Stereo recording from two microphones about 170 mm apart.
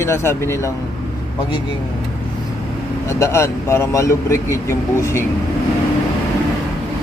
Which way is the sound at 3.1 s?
15° left (ahead or behind).